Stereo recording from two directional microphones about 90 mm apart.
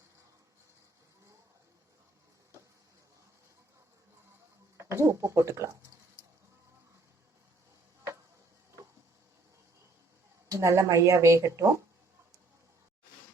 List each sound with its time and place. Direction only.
4.8 s speech: 30° right (ahead or behind)
10.5 s speech: 35° right (ahead or behind)